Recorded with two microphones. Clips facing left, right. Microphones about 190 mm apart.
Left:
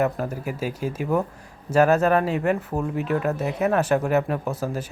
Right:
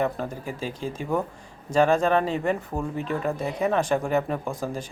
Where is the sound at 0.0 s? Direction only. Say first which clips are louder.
Left 3 dB; 5° left (ahead or behind).